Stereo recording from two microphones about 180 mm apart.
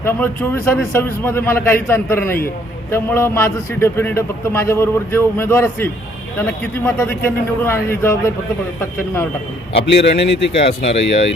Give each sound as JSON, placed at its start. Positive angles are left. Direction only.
{"t": 0.0, "sound": "a man's voice", "side_deg": 10}
{"t": 9.9, "sound": "speech", "side_deg": 70}